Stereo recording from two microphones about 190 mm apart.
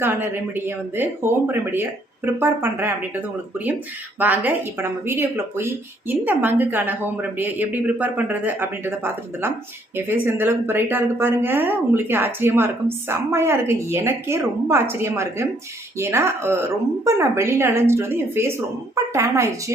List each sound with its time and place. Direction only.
0.0 s speech: 10° right (ahead or behind)